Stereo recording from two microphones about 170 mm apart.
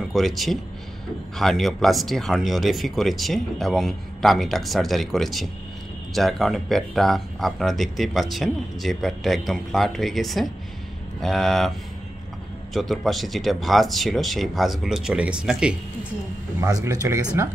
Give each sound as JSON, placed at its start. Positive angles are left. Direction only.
{"t": 0.1, "sound": "speech", "side_deg": 0}
{"t": 12.7, "sound": "speech", "side_deg": 0}
{"t": 16.6, "sound": "speech", "side_deg": -20}